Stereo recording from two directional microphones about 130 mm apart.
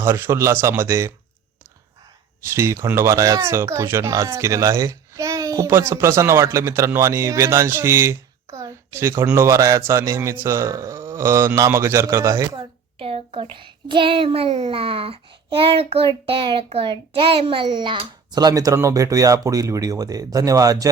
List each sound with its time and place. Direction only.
0.0 s speech: 20° right (ahead or behind)
2.8 s speech: 20° right (ahead or behind)
13.0 s a child's voice: 45° right (ahead or behind); by 20.9 s 25° right (ahead or behind)